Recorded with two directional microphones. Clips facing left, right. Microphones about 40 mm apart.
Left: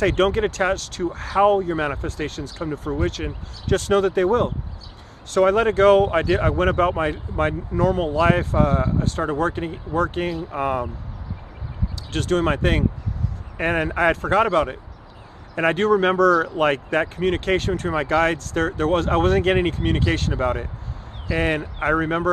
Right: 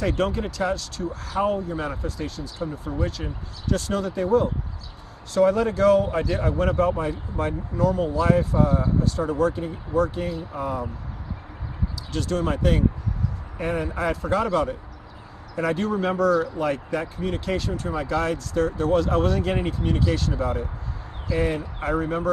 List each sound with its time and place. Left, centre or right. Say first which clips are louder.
0.0 s speech: left 6 dB; left
12.1 s speech: left 5 dB; left